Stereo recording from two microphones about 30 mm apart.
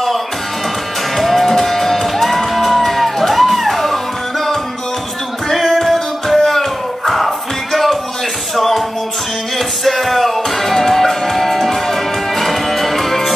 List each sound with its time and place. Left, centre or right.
1.1 s music: centre
5.5 s a sound: centre
7.1 s music: centre
9.8 s music: centre